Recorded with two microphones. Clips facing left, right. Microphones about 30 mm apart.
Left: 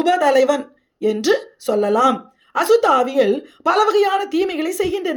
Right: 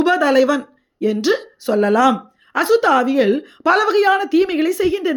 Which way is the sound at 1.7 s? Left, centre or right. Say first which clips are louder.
Right 2 dB; right.